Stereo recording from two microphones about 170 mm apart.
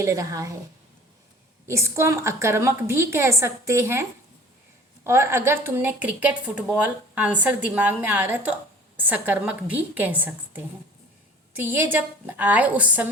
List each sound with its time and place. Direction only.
0.0 s a woman's voice: 20° right (ahead or behind)
1.6 s speech: 15° right (ahead or behind)
5.0 s speech: 15° right (ahead or behind)